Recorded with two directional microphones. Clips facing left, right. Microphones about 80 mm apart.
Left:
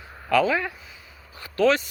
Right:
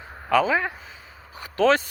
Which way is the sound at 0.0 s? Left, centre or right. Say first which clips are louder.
Even; right.